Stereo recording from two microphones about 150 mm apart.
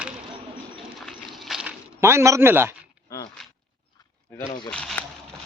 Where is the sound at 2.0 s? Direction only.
20° right (ahead or behind).